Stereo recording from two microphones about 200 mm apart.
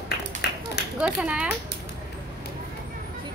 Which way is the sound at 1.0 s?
5° right (ahead or behind).